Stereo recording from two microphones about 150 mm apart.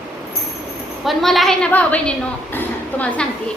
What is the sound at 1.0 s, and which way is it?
A woman's voice, centre (ahead or behind).